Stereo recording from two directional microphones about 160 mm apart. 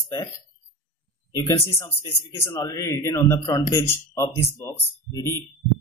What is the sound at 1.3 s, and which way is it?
A man's voice, 15° left (ahead or behind).